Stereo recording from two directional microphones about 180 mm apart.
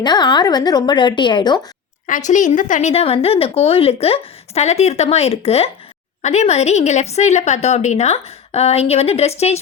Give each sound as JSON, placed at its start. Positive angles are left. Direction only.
{"t": 0.0, "sound": "a woman's voice", "side_deg": 25}
{"t": 2.0, "sound": "a woman's voice", "side_deg": 45}